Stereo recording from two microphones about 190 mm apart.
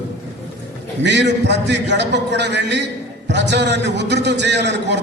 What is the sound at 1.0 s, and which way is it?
A man's voice, 65° right (ahead or behind).